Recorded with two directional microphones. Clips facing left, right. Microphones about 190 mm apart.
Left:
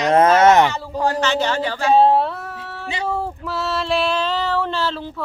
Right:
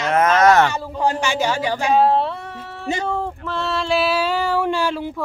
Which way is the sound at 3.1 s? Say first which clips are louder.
Even; 5° left (ahead or behind).